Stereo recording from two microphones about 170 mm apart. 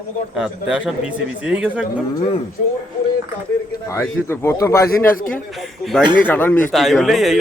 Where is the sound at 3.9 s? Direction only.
15° left (ahead or behind).